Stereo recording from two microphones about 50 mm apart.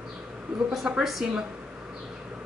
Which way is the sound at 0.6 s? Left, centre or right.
Centre.